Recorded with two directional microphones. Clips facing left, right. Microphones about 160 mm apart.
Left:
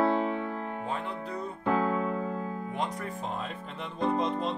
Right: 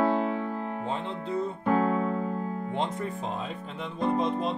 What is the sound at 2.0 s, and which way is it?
Music, 35° right (ahead or behind).